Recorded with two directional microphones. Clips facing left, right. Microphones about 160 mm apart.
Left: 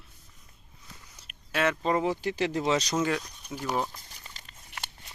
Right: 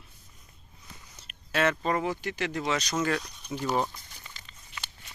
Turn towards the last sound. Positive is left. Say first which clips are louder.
# left 2 dB
turn(degrees=60)  # may be behind; listen again after turning